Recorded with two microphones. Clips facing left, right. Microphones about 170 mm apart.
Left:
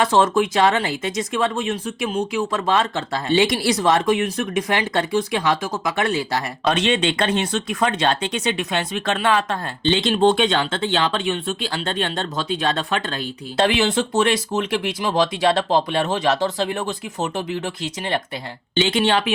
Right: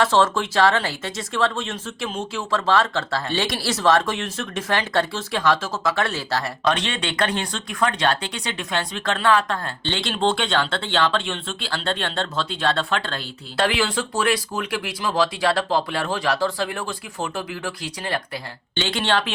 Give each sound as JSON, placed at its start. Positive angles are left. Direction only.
{"t": 0.0, "sound": "speech", "side_deg": 15}